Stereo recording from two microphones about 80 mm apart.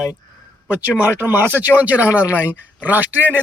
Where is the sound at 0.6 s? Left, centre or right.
Centre.